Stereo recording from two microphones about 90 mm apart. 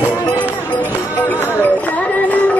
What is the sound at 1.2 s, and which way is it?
Music, 20° left (ahead or behind).